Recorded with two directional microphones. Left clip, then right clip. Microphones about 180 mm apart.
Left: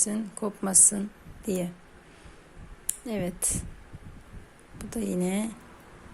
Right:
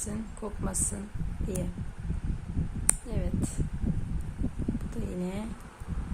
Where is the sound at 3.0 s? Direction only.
40° left (ahead or behind).